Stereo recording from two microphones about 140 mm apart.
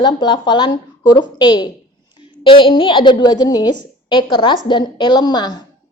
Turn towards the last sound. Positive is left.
turn(degrees=30)  # may be behind; listen again after turning